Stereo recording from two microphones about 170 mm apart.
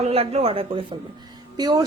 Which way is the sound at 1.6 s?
25° right (ahead or behind).